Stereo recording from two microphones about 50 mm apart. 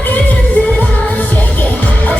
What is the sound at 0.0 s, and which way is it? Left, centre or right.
Music, left.